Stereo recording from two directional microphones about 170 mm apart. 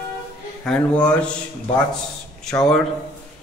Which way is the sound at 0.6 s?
5° left (ahead or behind).